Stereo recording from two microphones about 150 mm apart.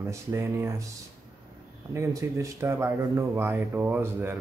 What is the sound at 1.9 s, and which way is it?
A man's voice, 20° right (ahead or behind).